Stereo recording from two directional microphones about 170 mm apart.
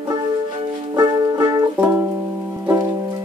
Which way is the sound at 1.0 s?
25° right (ahead or behind).